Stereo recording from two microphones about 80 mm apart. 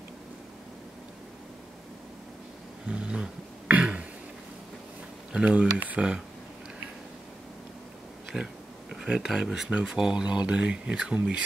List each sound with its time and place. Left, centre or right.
2.9 s throat clearing: centre
5.3 s speech: centre
8.3 s speech: centre